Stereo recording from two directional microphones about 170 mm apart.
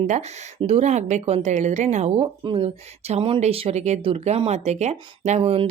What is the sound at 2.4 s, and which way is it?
Speech, 30° right (ahead or behind).